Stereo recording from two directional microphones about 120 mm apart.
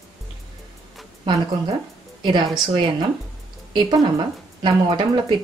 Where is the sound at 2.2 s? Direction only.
35° right (ahead or behind).